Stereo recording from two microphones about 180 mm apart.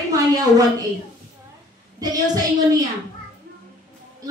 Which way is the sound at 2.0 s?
20° right (ahead or behind).